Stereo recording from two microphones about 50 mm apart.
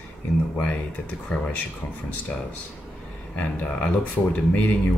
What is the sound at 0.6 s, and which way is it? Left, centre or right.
Speech, left.